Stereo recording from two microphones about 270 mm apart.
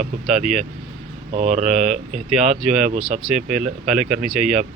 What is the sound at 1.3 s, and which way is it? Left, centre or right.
Speech, right.